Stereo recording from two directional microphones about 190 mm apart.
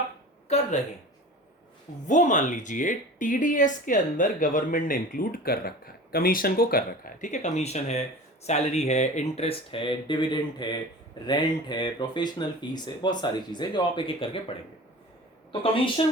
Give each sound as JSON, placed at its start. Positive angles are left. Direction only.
{"t": 0.4, "sound": "speech", "side_deg": 35}
{"t": 2.0, "sound": "speech", "side_deg": 40}
{"t": 15.6, "sound": "speech", "side_deg": 30}